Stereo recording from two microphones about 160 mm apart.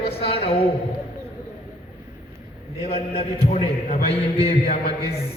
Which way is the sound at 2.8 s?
40° left (ahead or behind).